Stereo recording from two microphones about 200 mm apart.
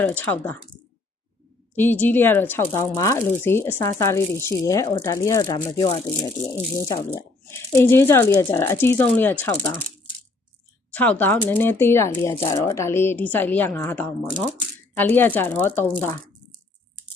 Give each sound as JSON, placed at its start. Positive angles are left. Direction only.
{"t": 0.0, "sound": "speech", "side_deg": 10}
{"t": 1.7, "sound": "speech", "side_deg": 10}
{"t": 10.9, "sound": "speech", "side_deg": 10}